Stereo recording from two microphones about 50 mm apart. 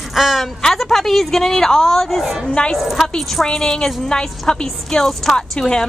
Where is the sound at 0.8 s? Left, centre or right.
Centre.